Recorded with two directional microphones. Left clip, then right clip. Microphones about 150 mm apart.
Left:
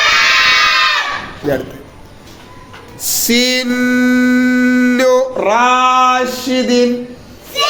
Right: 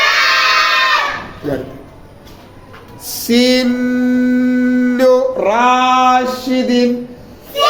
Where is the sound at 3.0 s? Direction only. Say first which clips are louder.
Even; 20° left (ahead or behind).